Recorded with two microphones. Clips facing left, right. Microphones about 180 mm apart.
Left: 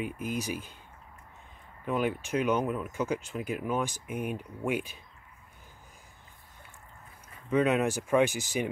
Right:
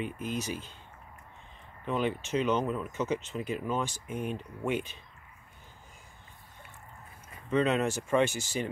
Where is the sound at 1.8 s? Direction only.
5° left (ahead or behind).